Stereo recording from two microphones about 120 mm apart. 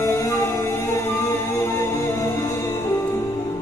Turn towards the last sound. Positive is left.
turn(degrees=20)  # may be behind; listen again after turning